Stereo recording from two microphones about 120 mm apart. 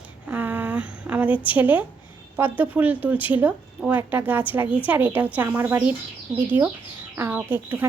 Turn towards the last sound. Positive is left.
turn(degrees=-15)  # may be behind; listen again after turning